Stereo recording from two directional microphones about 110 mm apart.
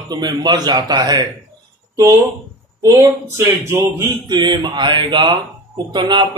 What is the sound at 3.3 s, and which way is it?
Speech, 25° right (ahead or behind).